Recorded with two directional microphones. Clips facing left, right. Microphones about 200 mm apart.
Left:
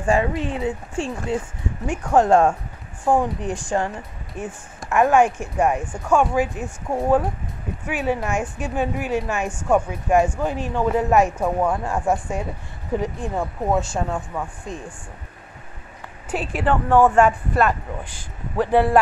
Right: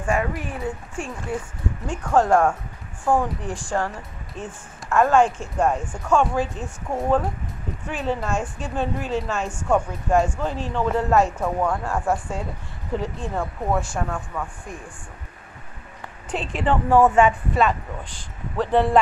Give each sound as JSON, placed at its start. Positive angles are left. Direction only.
{"t": 0.0, "sound": "speech", "side_deg": 25}
{"t": 16.3, "sound": "speech", "side_deg": 5}